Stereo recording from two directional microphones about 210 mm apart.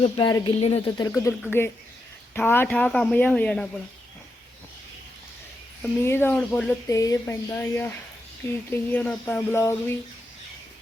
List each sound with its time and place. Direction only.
0.0 s speech: 20° left (ahead or behind)
0.9 s speech: 15° left (ahead or behind)
5.8 s speech: 10° left (ahead or behind)